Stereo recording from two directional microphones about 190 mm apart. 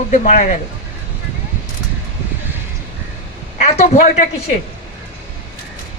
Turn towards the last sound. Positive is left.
turn(degrees=35)  # may be behind; listen again after turning